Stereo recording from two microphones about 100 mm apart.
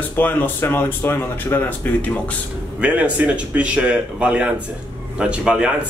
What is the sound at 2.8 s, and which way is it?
Speech, 15° right (ahead or behind).